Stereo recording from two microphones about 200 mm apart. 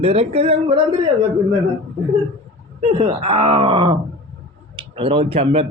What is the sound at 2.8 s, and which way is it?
Speech, 40° right (ahead or behind).